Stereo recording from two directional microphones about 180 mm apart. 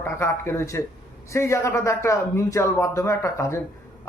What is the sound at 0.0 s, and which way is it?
Speech, 15° left (ahead or behind).